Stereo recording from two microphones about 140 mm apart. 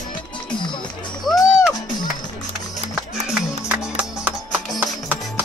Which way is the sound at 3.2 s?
5° right (ahead or behind).